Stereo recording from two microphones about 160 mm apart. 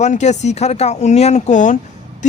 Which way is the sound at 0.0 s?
45° left (ahead or behind).